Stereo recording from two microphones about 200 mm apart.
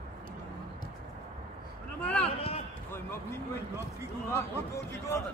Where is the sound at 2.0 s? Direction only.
5° left (ahead or behind).